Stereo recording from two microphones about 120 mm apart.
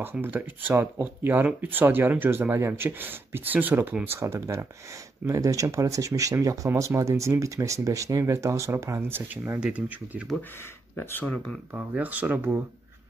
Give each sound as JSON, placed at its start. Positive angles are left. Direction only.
{"t": 0.0, "sound": "speech", "side_deg": -15}
{"t": 11.0, "sound": "speech", "side_deg": 15}
{"t": 11.7, "sound": "speech", "side_deg": -15}